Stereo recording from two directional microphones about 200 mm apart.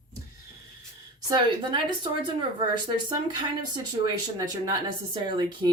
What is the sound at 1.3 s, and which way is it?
Speech, 25° right (ahead or behind).